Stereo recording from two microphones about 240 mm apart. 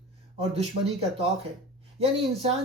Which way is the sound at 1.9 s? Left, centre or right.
Right.